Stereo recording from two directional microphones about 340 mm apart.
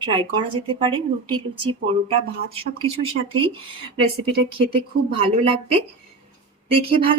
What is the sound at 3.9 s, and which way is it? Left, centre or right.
Speech, centre.